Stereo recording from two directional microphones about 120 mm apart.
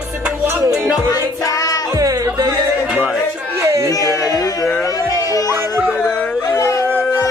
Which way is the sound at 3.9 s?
30° left (ahead or behind).